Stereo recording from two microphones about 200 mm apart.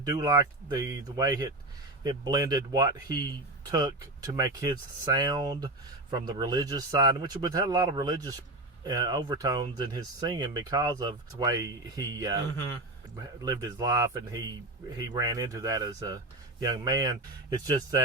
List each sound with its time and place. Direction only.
0.0 s speech: 20° right (ahead or behind)
13.4 s speech: 20° right (ahead or behind)